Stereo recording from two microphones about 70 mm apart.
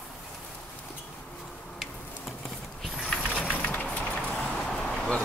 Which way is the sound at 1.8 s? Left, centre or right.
Centre.